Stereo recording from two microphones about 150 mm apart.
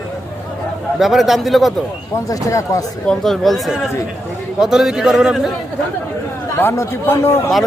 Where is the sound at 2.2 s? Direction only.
20° left (ahead or behind).